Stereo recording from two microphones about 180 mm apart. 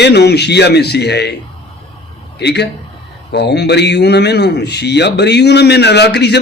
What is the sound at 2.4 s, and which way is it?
A man's voice, 70° left (ahead or behind).